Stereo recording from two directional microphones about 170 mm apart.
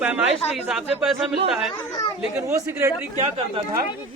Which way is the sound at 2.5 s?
15° right (ahead or behind).